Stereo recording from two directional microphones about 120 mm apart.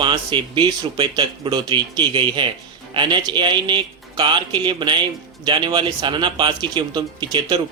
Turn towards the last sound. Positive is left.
turn(degrees=-35)  # may be behind; listen again after turning